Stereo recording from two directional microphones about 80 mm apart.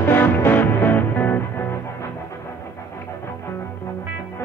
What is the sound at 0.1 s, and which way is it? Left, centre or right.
Music, left.